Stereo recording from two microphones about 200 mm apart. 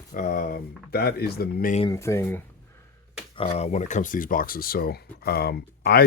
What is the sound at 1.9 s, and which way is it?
Speech, 15° left (ahead or behind).